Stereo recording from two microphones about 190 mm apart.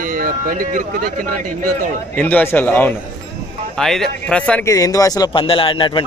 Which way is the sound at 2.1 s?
10° left (ahead or behind).